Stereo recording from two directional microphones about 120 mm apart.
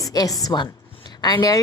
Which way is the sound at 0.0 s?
30° left (ahead or behind).